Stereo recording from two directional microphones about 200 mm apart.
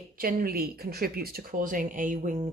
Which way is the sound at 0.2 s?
45° right (ahead or behind).